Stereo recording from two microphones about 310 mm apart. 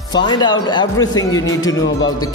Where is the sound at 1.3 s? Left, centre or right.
Left.